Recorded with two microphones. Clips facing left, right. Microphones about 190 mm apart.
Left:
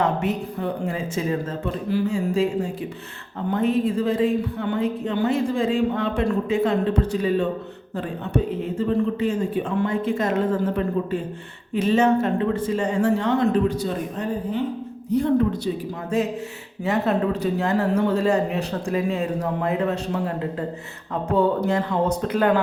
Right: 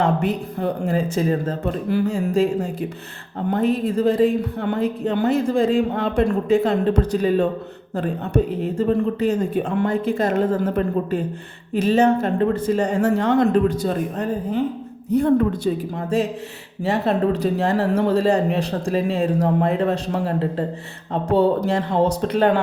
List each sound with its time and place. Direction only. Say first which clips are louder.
0.0 s a woman's voice: right 2 dB; 35° right (ahead or behind)
8.8 s a woman's voice: right 2 dB; 40° right (ahead or behind)
16.8 s a woman's voice: right 2 dB; 30° right (ahead or behind)